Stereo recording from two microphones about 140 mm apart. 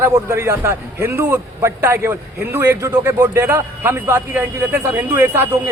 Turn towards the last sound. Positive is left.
turn(degrees=-20)  # may be behind; listen again after turning